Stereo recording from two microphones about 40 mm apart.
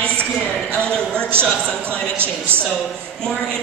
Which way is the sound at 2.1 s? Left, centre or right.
Right.